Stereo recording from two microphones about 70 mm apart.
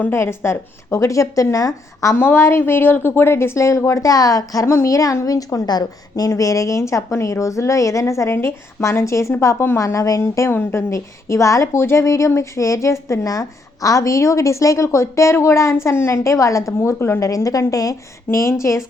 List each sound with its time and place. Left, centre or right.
0.1 s a woman's voice: left
2.1 s a woman's voice: left
4.6 s a woman's voice: left
5.6 s a woman's voice: left
6.2 s a woman's voice: left
10.9 s a woman's voice: left